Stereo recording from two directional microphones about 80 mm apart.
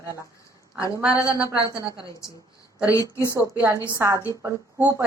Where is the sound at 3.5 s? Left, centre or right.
Right.